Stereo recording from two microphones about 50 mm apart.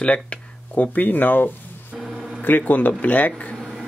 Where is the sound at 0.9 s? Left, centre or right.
Left.